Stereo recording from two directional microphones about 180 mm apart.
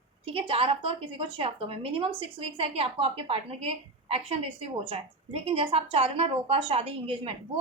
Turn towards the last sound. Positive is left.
turn(degrees=-35)  # may be behind; listen again after turning